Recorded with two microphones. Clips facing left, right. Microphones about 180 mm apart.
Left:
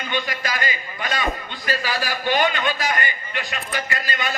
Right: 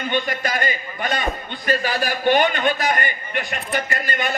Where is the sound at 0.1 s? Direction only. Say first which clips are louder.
Right 3 dB; 50° right (ahead or behind).